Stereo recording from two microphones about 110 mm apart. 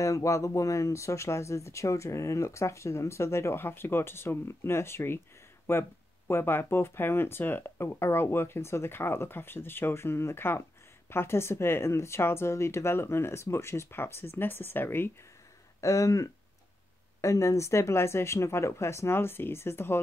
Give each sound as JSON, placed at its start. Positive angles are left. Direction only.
{"t": 0.0, "sound": "speech", "side_deg": 30}